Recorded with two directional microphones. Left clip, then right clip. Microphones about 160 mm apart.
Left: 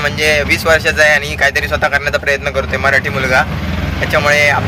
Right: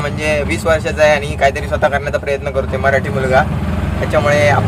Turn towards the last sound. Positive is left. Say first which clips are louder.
# left 2 dB
turn(degrees=-25)  # may be behind; listen again after turning